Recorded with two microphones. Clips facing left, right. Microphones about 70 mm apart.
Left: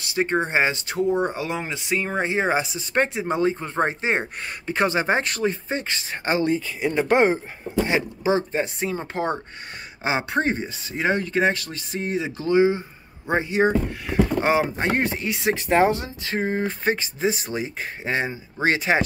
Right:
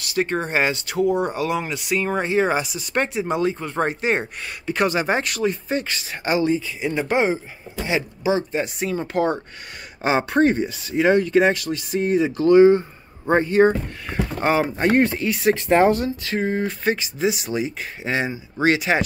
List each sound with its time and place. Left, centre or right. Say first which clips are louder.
0.0 s speech: even; left
6.5 s speech: even; left
7.7 s speech: left 2 dB; left; by 12.8 s centre
13.3 s speech: right 4 dB; centre; by 19.0 s left